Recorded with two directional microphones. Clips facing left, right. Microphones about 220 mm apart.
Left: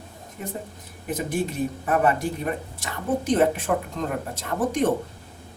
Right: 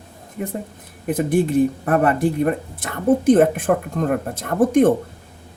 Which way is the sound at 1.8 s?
55° right (ahead or behind).